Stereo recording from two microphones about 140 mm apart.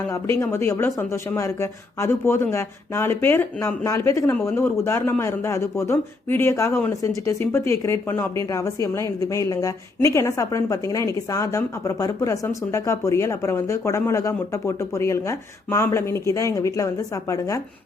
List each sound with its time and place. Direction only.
0.1 s a woman's voice: 20° left (ahead or behind)